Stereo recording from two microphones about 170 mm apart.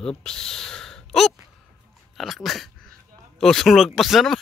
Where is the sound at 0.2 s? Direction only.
5° left (ahead or behind).